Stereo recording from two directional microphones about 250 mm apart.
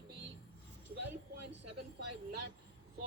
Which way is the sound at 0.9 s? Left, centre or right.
Right.